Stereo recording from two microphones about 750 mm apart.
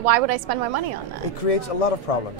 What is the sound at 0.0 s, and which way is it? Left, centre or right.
Speech, right.